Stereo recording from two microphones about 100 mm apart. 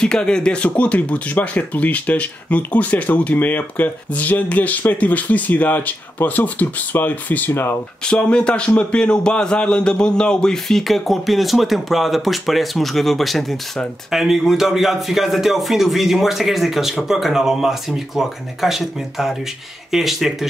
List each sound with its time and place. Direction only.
0.0 s speech: 10° left (ahead or behind)
8.0 s a man's voice: 10° left (ahead or behind)